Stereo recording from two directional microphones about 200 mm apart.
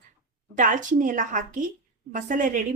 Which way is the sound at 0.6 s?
40° right (ahead or behind).